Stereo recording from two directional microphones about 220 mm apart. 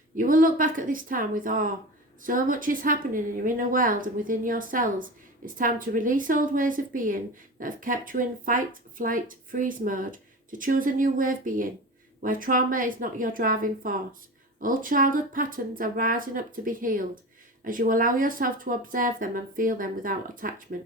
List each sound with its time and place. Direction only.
0.2 s speech: 40° right (ahead or behind)